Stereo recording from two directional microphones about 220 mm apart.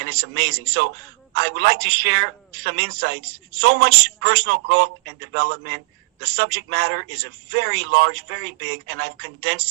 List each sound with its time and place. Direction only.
0.0 s a woman's voice: 50° right (ahead or behind)